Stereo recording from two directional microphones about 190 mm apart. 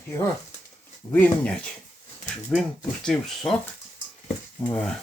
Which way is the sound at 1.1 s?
10° left (ahead or behind).